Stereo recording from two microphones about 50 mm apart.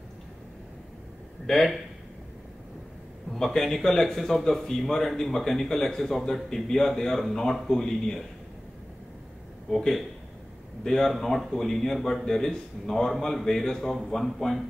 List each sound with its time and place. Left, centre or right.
1.5 s speech: centre
3.5 s a man's voice: centre
9.7 s a man's voice: centre